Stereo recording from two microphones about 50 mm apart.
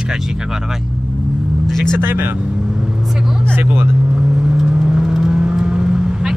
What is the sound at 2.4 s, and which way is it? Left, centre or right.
Vehicle, centre.